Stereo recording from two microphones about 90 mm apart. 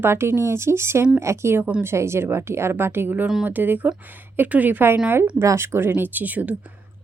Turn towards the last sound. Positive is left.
turn(degrees=-20)  # may be behind; listen again after turning